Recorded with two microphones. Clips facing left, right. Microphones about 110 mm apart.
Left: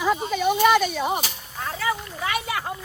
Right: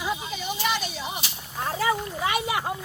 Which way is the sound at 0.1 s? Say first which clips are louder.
Left 9 dB; 55° left (ahead or behind).